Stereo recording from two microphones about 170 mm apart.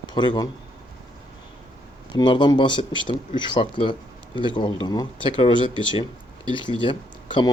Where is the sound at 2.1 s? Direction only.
25° left (ahead or behind).